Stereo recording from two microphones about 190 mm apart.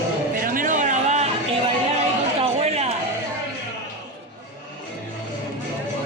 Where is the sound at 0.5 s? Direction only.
40° right (ahead or behind).